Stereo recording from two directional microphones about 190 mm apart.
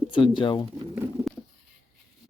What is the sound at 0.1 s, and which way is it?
Speech, 25° left (ahead or behind).